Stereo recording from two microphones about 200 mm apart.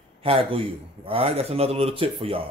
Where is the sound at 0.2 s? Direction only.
25° right (ahead or behind).